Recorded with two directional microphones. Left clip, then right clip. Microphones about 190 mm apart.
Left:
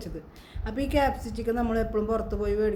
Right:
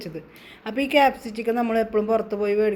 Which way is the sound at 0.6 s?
10° right (ahead or behind).